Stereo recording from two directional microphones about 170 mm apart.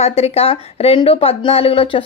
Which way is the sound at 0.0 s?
40° left (ahead or behind).